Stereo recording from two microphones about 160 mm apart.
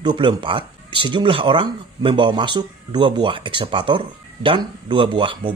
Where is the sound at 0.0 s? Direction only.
30° right (ahead or behind).